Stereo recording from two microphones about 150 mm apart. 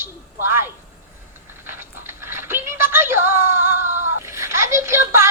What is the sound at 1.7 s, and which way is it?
Music, 15° right (ahead or behind).